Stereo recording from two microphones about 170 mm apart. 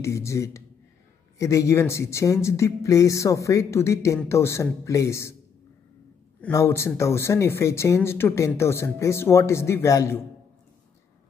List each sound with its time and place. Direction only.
0.0 s speech: 15° left (ahead or behind)
6.5 s speech: 15° left (ahead or behind)